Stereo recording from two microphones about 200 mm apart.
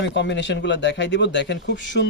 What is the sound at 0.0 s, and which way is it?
Speech, 60° left (ahead or behind).